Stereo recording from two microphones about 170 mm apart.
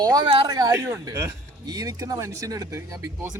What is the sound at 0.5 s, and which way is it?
Speech, 20° right (ahead or behind).